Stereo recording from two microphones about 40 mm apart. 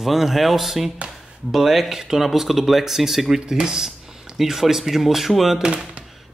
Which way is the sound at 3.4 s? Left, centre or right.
Centre.